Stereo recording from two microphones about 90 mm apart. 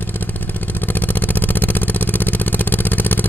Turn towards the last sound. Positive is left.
turn(degrees=20)  # may be behind; listen again after turning